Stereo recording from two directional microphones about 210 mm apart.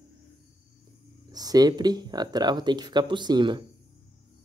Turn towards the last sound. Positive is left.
turn(degrees=-20)  # may be behind; listen again after turning